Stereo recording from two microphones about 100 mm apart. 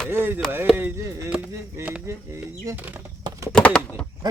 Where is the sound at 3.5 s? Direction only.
10° left (ahead or behind).